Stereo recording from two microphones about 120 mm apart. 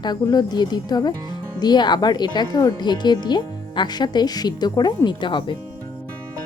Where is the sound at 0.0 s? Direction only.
35° left (ahead or behind).